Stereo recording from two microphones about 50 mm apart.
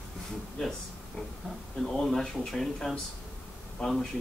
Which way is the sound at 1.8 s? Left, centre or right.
Centre.